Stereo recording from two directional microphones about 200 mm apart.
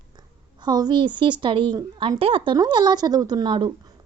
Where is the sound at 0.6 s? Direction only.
20° right (ahead or behind).